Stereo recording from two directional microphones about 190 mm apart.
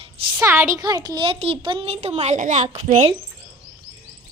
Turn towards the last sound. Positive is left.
turn(degrees=-35)  # may be behind; listen again after turning